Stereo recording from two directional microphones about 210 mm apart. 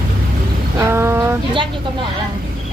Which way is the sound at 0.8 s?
10° right (ahead or behind).